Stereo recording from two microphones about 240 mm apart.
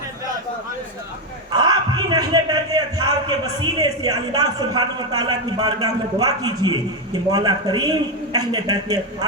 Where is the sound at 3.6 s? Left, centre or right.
Centre.